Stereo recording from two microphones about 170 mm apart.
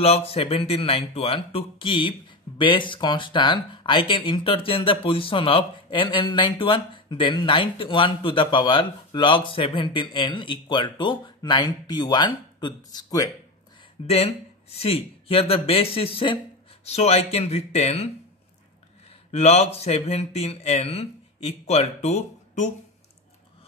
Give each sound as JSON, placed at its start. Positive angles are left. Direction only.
{"t": 0.0, "sound": "a man's voice", "side_deg": 35}
{"t": 14.0, "sound": "speech", "side_deg": 35}
{"t": 19.3, "sound": "speech", "side_deg": 40}